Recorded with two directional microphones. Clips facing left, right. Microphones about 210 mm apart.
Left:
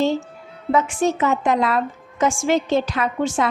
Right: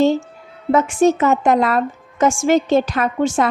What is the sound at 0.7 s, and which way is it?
A woman's voice, 45° right (ahead or behind).